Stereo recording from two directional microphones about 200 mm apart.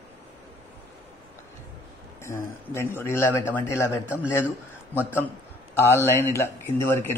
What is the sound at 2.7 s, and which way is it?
A man's voice, 10° left (ahead or behind).